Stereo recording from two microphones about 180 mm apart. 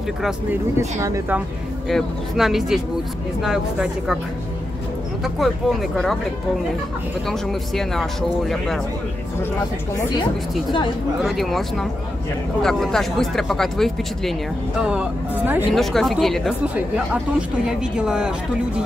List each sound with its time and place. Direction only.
0.2 s speech: 15° right (ahead or behind)
1.9 s speech: centre (ahead or behind)
5.2 s speech: centre (ahead or behind)
7.2 s speech: centre (ahead or behind)
11.2 s speech: centre (ahead or behind)